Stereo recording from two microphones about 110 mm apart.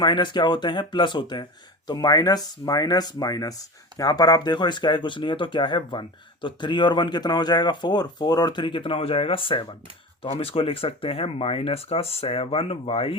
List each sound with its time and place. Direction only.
0.0 s speech: 45° left (ahead or behind)